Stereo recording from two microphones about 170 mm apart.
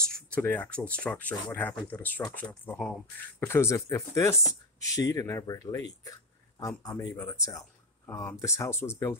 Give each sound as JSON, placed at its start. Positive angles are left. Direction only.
{"t": 0.1, "sound": "speech", "side_deg": 10}